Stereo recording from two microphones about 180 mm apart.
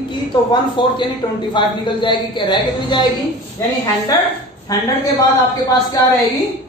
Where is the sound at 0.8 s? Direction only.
25° left (ahead or behind).